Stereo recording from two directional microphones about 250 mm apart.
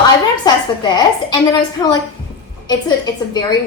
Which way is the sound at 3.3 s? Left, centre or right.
Centre.